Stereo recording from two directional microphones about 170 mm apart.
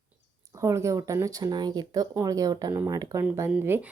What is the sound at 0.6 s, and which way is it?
Speech, 15° right (ahead or behind).